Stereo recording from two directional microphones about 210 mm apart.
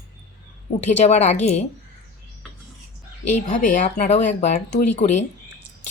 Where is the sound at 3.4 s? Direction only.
35° left (ahead or behind).